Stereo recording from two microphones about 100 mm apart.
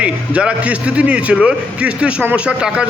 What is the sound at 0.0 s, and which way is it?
A man's voice, 10° right (ahead or behind).